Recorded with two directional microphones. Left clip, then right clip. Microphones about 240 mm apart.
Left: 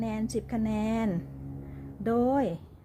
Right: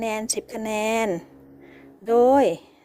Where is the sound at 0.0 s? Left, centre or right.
Right.